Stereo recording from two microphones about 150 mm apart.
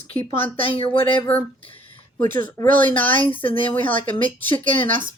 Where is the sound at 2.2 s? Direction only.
70° right (ahead or behind).